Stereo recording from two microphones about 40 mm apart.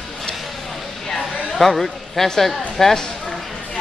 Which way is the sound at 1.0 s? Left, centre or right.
Centre.